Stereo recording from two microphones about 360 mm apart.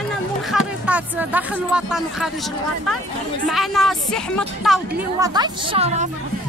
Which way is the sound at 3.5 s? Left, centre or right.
Centre.